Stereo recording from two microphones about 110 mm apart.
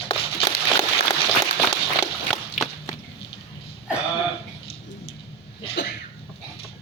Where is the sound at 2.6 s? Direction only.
90° left.